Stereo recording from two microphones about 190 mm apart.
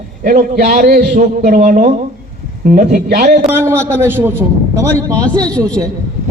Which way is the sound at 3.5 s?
10° right (ahead or behind).